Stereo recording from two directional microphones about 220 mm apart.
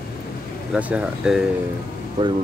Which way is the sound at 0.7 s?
5° right (ahead or behind).